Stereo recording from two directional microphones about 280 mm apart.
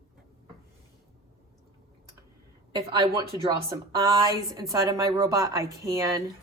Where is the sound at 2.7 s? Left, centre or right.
Centre.